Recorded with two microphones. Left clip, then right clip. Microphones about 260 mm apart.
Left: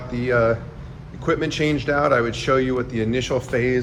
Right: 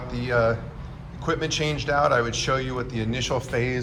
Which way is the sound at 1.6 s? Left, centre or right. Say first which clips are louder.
Left 3 dB; centre.